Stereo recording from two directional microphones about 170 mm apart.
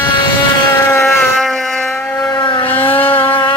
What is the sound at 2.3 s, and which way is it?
Vehicle, 30° left (ahead or behind).